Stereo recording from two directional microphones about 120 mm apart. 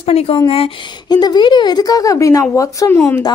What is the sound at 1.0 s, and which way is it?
Speech, 35° left (ahead or behind).